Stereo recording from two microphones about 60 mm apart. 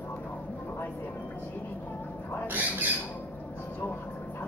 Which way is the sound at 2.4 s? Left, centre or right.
Right.